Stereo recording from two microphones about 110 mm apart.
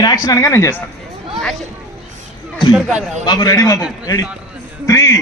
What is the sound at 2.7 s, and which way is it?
Speech, 5° right (ahead or behind).